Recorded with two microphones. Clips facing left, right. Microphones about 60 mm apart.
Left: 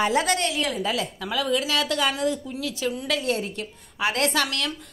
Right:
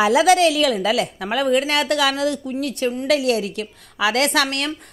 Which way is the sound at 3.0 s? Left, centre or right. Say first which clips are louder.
Right 9 dB; right.